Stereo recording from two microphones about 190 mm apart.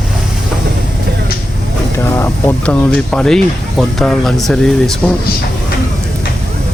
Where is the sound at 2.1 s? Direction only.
15° left (ahead or behind).